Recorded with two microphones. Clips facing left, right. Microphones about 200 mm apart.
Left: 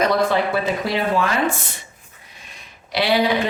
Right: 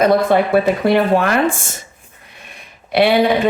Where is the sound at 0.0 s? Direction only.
55° right (ahead or behind).